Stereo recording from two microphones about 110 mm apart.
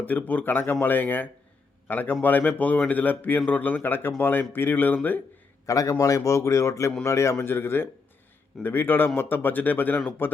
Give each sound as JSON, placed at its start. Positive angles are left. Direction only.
{"t": 0.0, "sound": "speech", "side_deg": 15}
{"t": 5.6, "sound": "a man's voice", "side_deg": 30}